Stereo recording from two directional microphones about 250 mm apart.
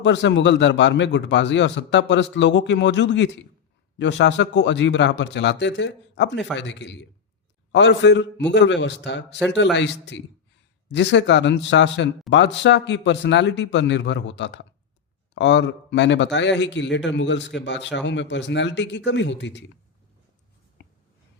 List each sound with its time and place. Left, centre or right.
0.0 s a man's voice: left